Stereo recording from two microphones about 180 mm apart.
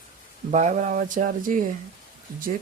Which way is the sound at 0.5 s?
40° right (ahead or behind).